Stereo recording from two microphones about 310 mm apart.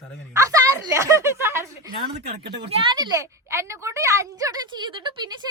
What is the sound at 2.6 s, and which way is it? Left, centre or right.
A woman's voice, centre.